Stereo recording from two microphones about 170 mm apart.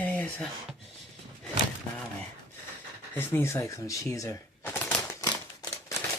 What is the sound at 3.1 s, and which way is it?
Speech, 15° left (ahead or behind).